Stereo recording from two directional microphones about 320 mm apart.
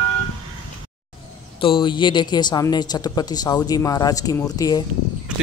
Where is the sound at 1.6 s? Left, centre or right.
Centre.